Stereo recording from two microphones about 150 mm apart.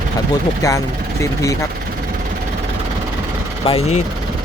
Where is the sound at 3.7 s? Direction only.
45° left (ahead or behind).